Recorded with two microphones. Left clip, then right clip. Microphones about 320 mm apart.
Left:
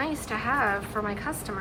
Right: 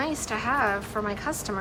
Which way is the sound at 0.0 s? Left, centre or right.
Centre.